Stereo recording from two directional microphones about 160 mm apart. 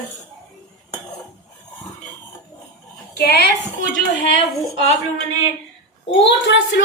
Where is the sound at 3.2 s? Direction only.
90° left.